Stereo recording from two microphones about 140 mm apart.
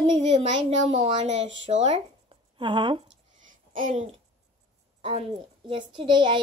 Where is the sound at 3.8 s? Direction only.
50° right (ahead or behind).